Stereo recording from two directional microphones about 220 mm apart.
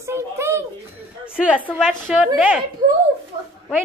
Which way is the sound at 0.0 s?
10° right (ahead or behind).